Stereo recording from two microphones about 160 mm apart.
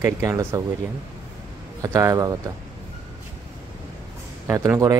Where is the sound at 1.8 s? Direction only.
20° right (ahead or behind).